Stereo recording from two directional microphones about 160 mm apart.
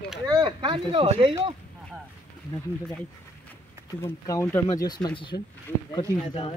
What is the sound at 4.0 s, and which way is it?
Speech, 15° left (ahead or behind).